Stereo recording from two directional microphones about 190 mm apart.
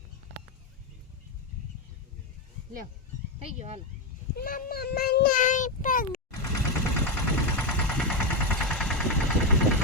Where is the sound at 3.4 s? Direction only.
35° right (ahead or behind).